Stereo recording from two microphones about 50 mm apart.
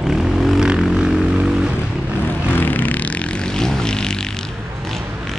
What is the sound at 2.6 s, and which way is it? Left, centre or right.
Vehicle, left.